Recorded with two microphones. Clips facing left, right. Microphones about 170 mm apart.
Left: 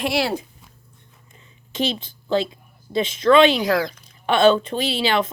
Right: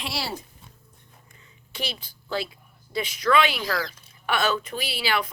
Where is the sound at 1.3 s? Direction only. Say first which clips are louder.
Left 6 dB; 20° left (ahead or behind).